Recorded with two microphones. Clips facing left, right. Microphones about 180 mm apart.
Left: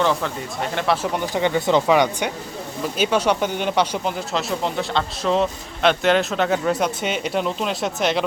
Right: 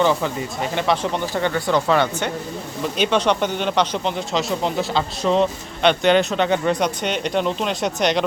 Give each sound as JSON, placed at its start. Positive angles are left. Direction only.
{"t": 0.0, "sound": "speech", "side_deg": 0}
{"t": 1.1, "sound": "speech", "side_deg": 15}